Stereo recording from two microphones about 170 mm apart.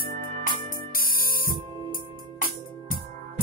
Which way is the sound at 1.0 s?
60° left (ahead or behind).